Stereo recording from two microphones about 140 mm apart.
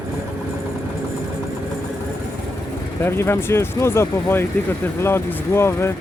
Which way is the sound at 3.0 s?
15° left (ahead or behind).